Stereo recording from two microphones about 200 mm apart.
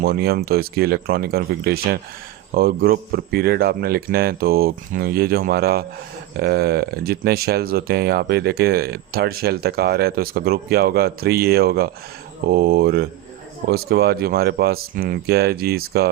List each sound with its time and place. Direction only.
0.0 s speech: 50° right (ahead or behind)